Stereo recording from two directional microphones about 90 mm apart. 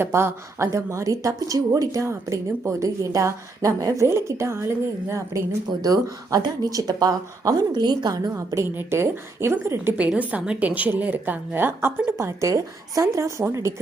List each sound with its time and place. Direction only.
0.0 s a woman's voice: 25° right (ahead or behind)
5.8 s speech: 45° right (ahead or behind)
8.3 s a woman's voice: 35° right (ahead or behind)
10.0 s a woman's voice: 15° right (ahead or behind); by 13.7 s 35° right (ahead or behind)